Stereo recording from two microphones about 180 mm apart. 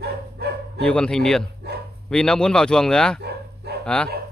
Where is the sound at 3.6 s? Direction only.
65° right (ahead or behind).